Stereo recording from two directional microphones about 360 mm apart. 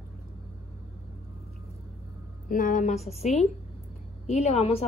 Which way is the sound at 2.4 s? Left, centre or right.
Left.